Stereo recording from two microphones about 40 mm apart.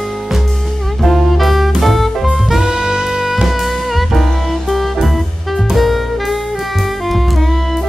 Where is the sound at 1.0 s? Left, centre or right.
Centre.